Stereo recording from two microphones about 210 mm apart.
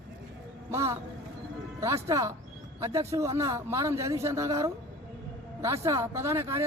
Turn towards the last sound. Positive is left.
turn(degrees=-15)  # may be behind; listen again after turning